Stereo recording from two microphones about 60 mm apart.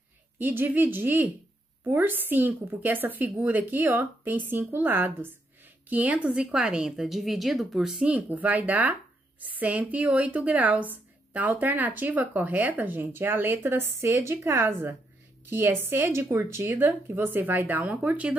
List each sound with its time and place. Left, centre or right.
0.4 s speech: right
5.9 s a woman's voice: right; by 8.0 s centre
8.0 s a woman's voice: right